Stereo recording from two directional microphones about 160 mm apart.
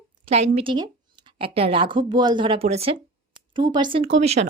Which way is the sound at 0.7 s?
25° right (ahead or behind).